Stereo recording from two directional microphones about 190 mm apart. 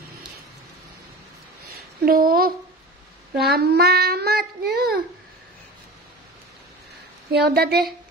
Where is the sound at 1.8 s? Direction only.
50° right (ahead or behind).